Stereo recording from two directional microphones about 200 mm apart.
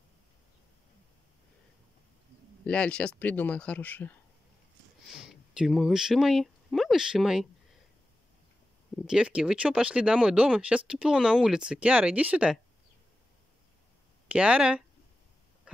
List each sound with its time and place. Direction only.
2.6 s speech: 5° left (ahead or behind)
5.1 s speech: 5° right (ahead or behind)
8.9 s speech: 5° right (ahead or behind)
14.2 s speech: 5° right (ahead or behind)